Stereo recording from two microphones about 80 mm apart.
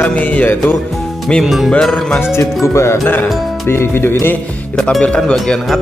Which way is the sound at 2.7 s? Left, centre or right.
Left.